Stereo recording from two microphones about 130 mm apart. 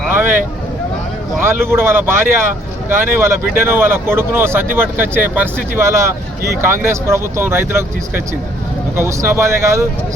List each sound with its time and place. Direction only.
0.1 s vehicle: 15° right (ahead or behind)
1.4 s speech: 20° right (ahead or behind)